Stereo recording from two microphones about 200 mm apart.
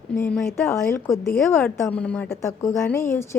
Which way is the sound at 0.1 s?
5° left (ahead or behind).